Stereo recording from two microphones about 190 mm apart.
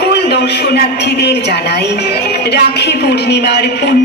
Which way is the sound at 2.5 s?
60° left (ahead or behind).